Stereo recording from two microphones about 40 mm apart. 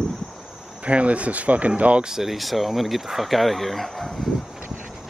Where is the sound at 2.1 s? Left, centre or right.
Centre.